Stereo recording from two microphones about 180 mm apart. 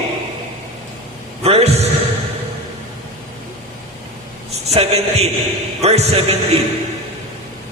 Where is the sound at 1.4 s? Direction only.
35° right (ahead or behind).